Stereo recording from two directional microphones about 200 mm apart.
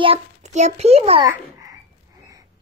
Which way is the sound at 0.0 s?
30° right (ahead or behind).